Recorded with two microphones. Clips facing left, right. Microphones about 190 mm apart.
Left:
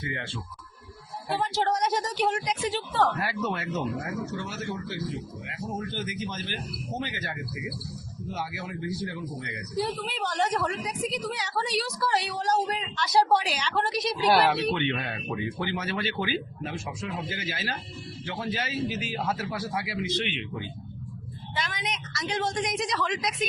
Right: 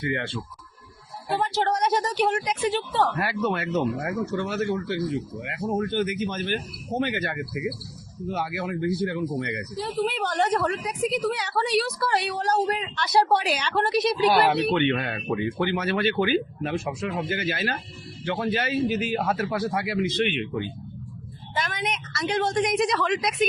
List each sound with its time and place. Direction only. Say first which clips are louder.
0.0 s a man's voice: right 7 dB; 60° right (ahead or behind)
1.3 s a man's voice: right 2 dB; 60° right (ahead or behind)
14.3 s speech: right 2 dB; 5° right (ahead or behind)
14.8 s a man's voice: right 6 dB; 60° right (ahead or behind)